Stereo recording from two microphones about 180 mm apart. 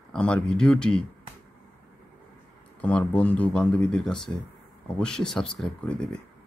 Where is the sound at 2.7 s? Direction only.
10° left (ahead or behind).